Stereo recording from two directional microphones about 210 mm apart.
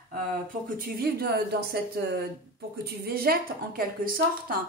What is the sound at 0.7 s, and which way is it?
A woman's voice, 45° right (ahead or behind).